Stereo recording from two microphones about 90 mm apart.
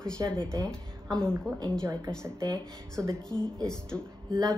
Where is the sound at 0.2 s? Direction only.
40° right (ahead or behind).